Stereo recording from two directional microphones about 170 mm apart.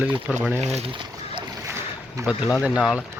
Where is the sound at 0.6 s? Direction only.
40° right (ahead or behind).